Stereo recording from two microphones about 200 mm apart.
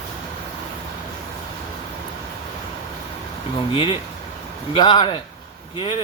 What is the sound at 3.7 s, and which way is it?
Speech, 25° left (ahead or behind).